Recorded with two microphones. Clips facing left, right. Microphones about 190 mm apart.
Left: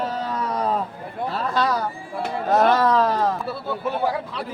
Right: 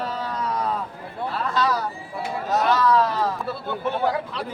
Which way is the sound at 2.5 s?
55° left (ahead or behind).